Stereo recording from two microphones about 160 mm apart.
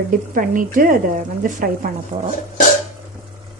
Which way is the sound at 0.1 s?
60° right (ahead or behind).